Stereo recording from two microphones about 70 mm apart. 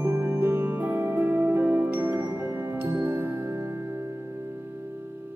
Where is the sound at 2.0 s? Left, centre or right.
Right.